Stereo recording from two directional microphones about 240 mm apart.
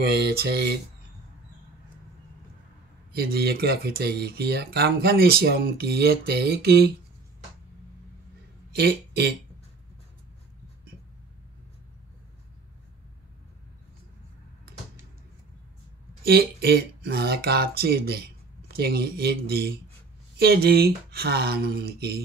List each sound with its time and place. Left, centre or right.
0.0 s speech: right
3.1 s speech: right
8.7 s speech: right
16.3 s speech: right